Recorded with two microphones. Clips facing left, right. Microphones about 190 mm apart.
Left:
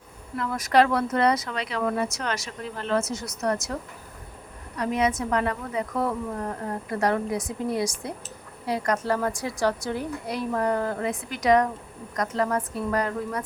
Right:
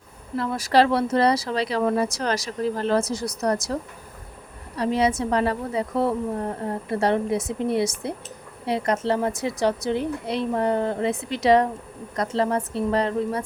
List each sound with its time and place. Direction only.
0.3 s speech: 30° right (ahead or behind)
4.8 s a woman's voice: 30° right (ahead or behind)